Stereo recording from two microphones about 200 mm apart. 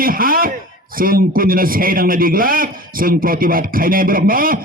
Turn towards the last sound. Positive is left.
turn(degrees=-45)  # may be behind; listen again after turning